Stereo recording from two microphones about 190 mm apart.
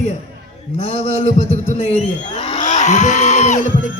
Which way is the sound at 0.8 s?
35° left (ahead or behind).